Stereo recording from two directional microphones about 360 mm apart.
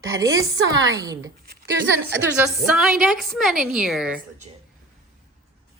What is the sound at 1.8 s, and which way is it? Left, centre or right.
Speech, right.